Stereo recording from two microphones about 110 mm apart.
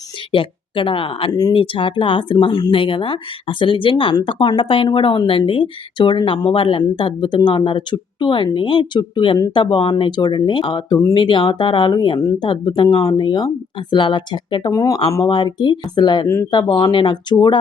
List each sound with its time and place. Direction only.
0.3 s speech: 50° left (ahead or behind)
1.3 s speech: 35° left (ahead or behind)
1.5 s speech: 50° left (ahead or behind)
14.7 s speech: 30° left (ahead or behind)
16.2 s speech: 25° left (ahead or behind)
16.5 s speech: 45° left (ahead or behind)